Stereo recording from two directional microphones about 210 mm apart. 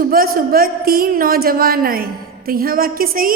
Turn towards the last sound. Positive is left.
turn(degrees=-40)  # may be behind; listen again after turning